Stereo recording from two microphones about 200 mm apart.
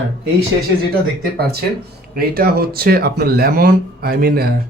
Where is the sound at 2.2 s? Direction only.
50° right (ahead or behind).